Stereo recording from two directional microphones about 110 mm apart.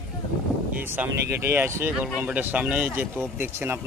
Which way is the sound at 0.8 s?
15° right (ahead or behind).